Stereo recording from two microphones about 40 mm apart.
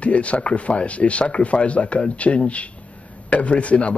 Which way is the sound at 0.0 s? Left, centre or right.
Left.